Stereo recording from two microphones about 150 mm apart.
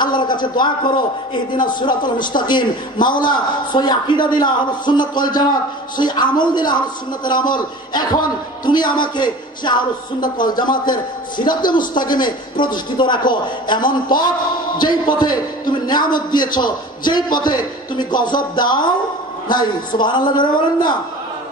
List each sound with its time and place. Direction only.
0.0 s a sound: 30° left (ahead or behind)
0.6 s a man's voice: 30° left (ahead or behind)
12.1 s a man's voice: 30° left (ahead or behind)